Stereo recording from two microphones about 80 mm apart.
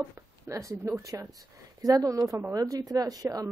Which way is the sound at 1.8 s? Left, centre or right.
Right.